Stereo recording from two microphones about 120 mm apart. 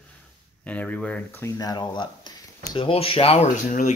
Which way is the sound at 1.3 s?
25° left (ahead or behind).